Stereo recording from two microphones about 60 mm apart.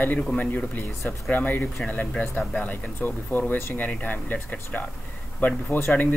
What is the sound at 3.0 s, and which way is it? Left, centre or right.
Speech, left.